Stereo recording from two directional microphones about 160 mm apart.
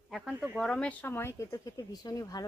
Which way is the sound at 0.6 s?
5° left (ahead or behind).